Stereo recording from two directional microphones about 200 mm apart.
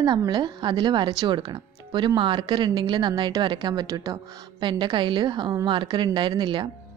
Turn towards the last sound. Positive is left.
turn(degrees=-20)  # may be behind; listen again after turning